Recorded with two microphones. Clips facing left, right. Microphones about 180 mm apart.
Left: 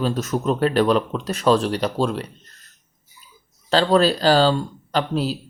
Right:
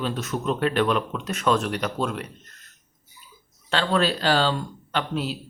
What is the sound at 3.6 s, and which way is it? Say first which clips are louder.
Speech: left 6 dB; 35° left (ahead or behind).